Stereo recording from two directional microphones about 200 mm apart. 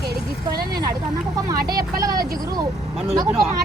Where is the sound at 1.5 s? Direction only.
20° right (ahead or behind).